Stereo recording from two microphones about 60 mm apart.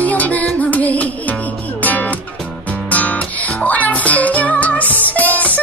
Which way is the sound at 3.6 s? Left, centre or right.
Left.